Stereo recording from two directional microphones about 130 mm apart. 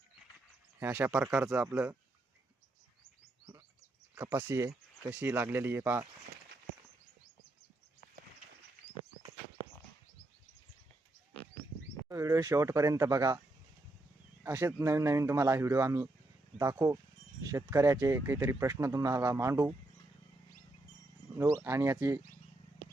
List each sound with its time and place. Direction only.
0.8 s speech: 15° right (ahead or behind)
1.6 s speech: 15° right (ahead or behind)
4.1 s speech: 15° right (ahead or behind)
12.0 s speech: 25° right (ahead or behind)
14.4 s speech: 20° right (ahead or behind)
21.6 s speech: 20° right (ahead or behind)